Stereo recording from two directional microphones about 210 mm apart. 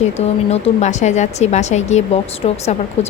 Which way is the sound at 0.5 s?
30° left (ahead or behind).